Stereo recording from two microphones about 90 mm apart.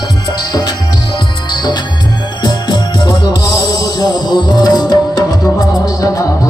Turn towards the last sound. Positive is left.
turn(degrees=40)  # may be behind; listen again after turning